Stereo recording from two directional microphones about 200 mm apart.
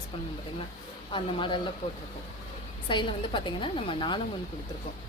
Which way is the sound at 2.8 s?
25° left (ahead or behind).